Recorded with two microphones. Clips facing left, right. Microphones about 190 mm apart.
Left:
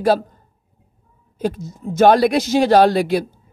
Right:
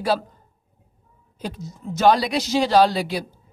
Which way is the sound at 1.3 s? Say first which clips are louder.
Left 9 dB; 50° left (ahead or behind).